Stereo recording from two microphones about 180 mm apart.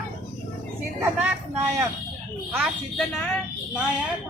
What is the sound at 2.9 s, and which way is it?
Speech, 5° left (ahead or behind).